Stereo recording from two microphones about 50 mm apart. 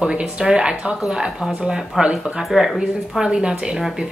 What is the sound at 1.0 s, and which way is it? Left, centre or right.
Speech, centre.